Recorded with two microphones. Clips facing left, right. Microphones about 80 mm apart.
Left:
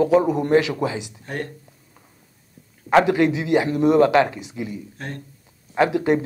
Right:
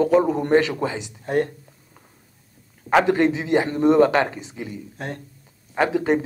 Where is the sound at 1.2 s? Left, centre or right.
Right.